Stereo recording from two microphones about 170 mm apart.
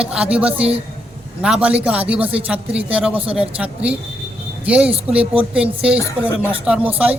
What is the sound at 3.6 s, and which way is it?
Speech, 5° right (ahead or behind).